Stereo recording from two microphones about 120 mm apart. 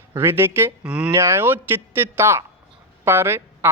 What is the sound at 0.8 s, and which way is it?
Speech, 10° right (ahead or behind).